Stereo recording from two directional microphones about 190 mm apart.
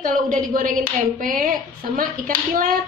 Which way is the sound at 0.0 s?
45° right (ahead or behind).